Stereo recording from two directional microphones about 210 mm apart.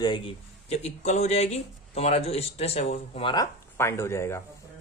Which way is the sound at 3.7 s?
10° left (ahead or behind).